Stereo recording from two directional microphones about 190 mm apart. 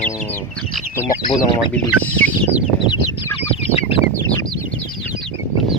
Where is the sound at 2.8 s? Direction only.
25° left (ahead or behind).